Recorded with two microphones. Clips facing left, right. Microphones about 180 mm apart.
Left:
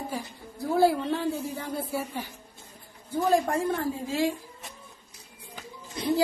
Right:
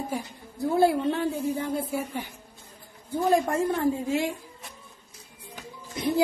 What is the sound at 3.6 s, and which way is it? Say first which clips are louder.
Speech: right 3 dB; 20° right (ahead or behind).